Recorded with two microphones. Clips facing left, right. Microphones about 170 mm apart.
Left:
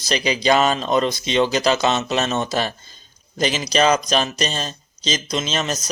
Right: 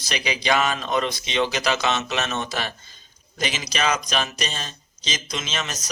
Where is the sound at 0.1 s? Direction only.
35° left (ahead or behind).